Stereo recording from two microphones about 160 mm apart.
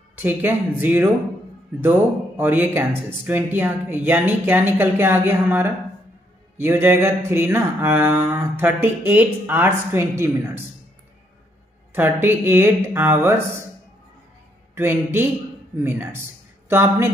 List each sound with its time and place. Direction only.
0.1 s mantra: 10° right (ahead or behind)
11.9 s mantra: 15° right (ahead or behind)
14.8 s mantra: 15° right (ahead or behind)